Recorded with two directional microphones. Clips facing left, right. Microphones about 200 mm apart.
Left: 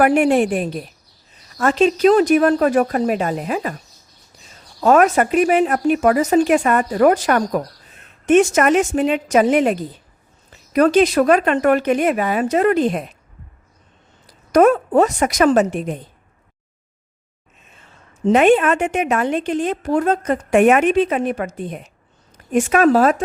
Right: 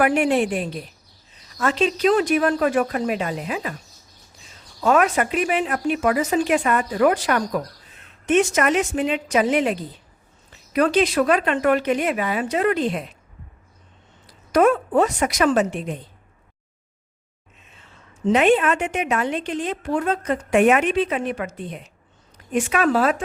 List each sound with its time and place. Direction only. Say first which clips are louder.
0.0 s a woman's voice: left 4 dB; 45° left (ahead or behind)
4.8 s a woman's voice: left 5 dB; 45° left (ahead or behind)
14.3 s a woman's voice: left 4 dB; 45° left (ahead or behind)
18.3 s a woman's voice: left 4 dB; 50° left (ahead or behind)